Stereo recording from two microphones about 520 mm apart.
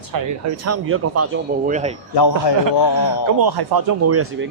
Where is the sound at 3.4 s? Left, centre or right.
Right.